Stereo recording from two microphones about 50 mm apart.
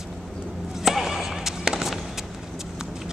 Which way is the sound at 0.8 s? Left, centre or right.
Centre.